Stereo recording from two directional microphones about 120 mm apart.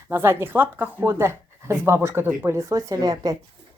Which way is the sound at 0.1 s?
20° right (ahead or behind).